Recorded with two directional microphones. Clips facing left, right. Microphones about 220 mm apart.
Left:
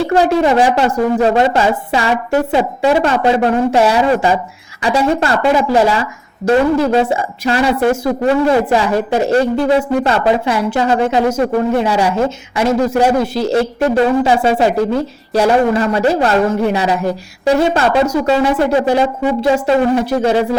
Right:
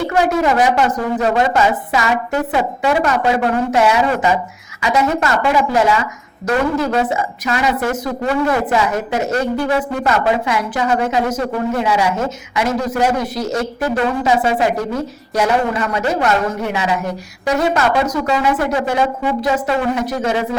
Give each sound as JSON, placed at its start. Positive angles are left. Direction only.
{"t": 0.1, "sound": "a woman's voice", "side_deg": 30}